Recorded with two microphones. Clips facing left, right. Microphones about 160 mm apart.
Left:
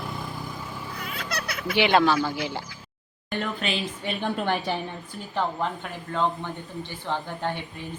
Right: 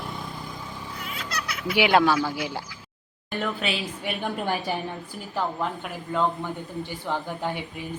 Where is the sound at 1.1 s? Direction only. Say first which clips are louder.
Left 1 dB; 55° left (ahead or behind).